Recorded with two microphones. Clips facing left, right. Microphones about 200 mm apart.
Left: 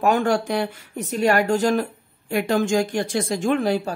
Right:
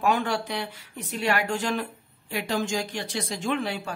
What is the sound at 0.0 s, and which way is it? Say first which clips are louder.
Speech: left 6 dB; 45° left (ahead or behind).